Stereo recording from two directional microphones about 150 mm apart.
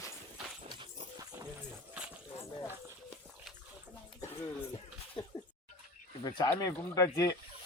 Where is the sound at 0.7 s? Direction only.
30° right (ahead or behind).